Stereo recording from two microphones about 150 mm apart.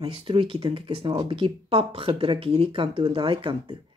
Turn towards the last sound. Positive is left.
turn(degrees=-35)  # may be behind; listen again after turning